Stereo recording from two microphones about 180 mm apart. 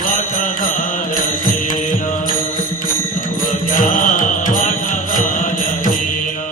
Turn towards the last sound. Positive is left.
turn(degrees=50)  # may be behind; listen again after turning